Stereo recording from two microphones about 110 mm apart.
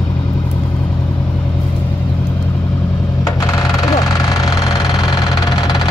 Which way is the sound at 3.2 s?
30° left (ahead or behind).